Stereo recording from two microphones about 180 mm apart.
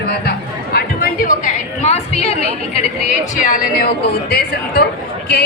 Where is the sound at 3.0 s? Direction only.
50° left (ahead or behind).